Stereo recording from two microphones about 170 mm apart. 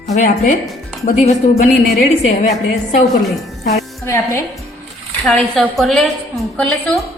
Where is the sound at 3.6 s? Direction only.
70° left (ahead or behind).